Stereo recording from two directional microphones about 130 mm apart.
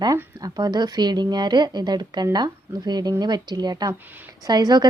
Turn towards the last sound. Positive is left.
turn(degrees=-30)  # may be behind; listen again after turning